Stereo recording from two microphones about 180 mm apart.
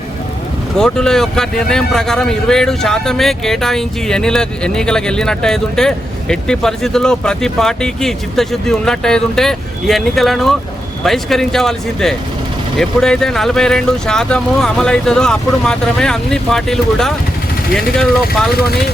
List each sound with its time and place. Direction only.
0.8 s a man's voice: 5° left (ahead or behind)